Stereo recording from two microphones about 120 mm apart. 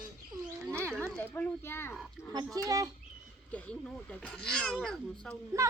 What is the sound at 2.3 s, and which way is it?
Speech, 30° right (ahead or behind).